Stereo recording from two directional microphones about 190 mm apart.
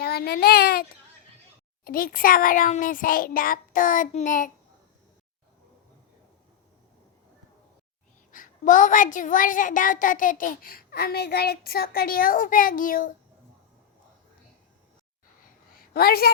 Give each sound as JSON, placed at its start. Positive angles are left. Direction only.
{"t": 0.0, "sound": "a woman's voice", "side_deg": 55}
{"t": 8.3, "sound": "a woman's voice", "side_deg": 45}
{"t": 15.7, "sound": "a sound", "side_deg": 50}